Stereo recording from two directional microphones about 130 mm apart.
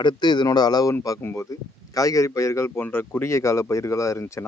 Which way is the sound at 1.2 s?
20° left (ahead or behind).